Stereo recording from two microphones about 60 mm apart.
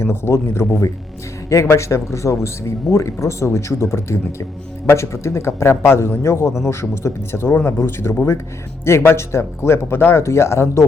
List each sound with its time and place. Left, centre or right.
0.0 s a man's voice: left